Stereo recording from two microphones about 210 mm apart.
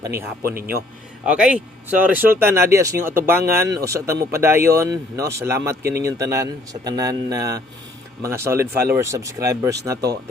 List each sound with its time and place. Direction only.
0.0 s speech: 10° right (ahead or behind)